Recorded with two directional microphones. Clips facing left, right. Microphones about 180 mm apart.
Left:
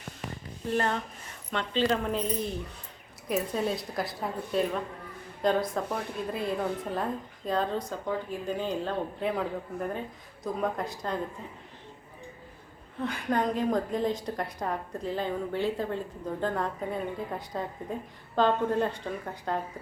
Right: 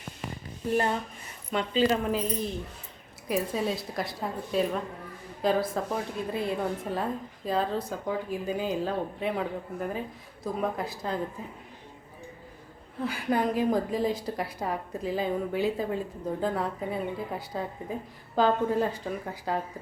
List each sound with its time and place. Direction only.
0.7 s a woman's voice: 10° right (ahead or behind)
13.0 s a woman's voice: 5° right (ahead or behind)